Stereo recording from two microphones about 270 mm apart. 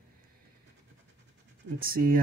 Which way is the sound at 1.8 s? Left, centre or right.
Right.